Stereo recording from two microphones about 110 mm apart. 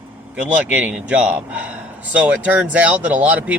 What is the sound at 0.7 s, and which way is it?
Speech, 15° right (ahead or behind).